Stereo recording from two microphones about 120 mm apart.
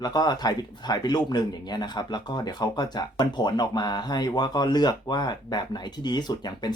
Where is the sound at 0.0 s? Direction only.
35° left (ahead or behind).